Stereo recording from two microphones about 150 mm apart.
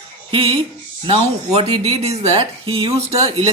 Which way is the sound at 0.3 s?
35° right (ahead or behind).